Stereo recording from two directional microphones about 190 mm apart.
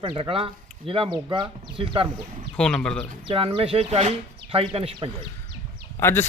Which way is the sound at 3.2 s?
30° right (ahead or behind).